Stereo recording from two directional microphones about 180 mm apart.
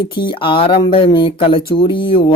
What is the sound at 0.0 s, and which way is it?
Speech, 25° left (ahead or behind).